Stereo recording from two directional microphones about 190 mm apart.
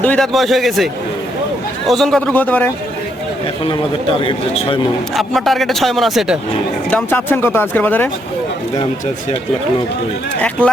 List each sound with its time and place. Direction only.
0.0 s a man's voice: 5° left (ahead or behind)
1.9 s speech: centre (ahead or behind)
4.2 s speech: 30° left (ahead or behind)
5.1 s a man's voice: centre (ahead or behind)
6.9 s speech: 10° left (ahead or behind)